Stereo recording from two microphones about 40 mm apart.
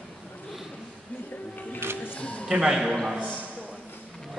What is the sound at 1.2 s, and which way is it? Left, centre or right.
Music, left.